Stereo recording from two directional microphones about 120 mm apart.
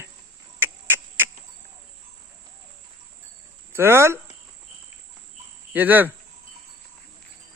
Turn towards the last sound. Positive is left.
turn(degrees=-15)  # may be behind; listen again after turning